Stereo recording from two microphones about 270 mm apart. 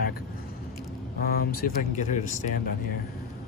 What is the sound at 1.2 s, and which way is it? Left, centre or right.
Speech, left.